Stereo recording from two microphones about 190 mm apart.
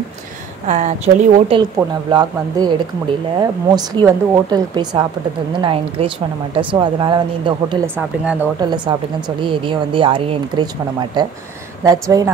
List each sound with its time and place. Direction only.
0.7 s speech: 40° right (ahead or behind)
1.6 s speech: 20° right (ahead or behind)
7.9 s speech: 10° right (ahead or behind)
8.5 s speech: 25° right (ahead or behind)